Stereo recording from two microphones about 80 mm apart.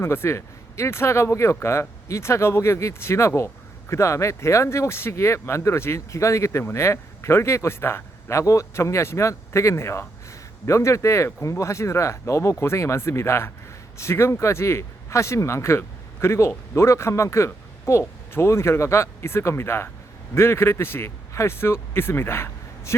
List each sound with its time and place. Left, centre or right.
0.0 s speech: left